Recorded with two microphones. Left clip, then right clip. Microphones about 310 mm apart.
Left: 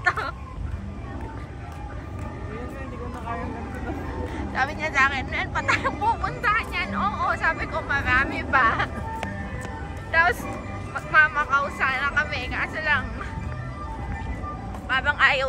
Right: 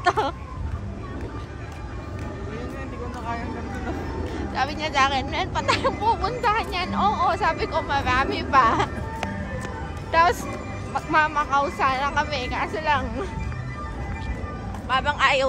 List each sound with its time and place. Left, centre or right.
4.3 s speech: centre
11.0 s speech: centre
14.9 s speech: centre